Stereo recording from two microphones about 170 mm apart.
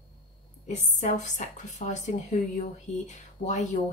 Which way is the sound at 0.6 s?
45° left (ahead or behind).